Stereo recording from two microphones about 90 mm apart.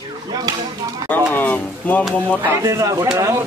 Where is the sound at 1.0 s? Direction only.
40° right (ahead or behind).